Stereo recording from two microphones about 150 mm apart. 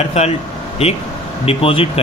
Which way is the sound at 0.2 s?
45° left (ahead or behind).